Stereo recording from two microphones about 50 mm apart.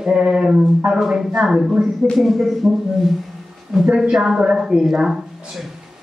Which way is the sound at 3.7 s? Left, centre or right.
Centre.